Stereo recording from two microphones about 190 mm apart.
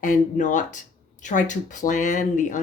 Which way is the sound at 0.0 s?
40° left (ahead or behind).